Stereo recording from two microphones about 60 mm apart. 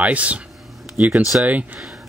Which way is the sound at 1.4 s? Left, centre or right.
Right.